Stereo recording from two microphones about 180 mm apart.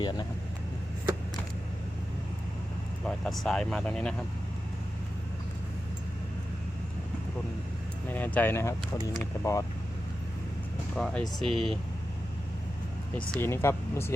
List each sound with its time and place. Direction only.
0.0 s speech: 25° left (ahead or behind)
3.0 s speech: centre (ahead or behind)
8.1 s speech: 10° left (ahead or behind)
10.9 s speech: centre (ahead or behind)
13.1 s speech: 10° left (ahead or behind)